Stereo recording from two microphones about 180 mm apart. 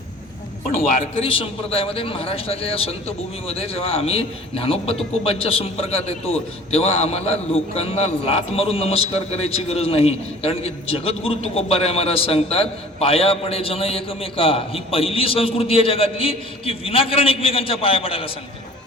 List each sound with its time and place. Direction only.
0.8 s a man's voice: 30° left (ahead or behind)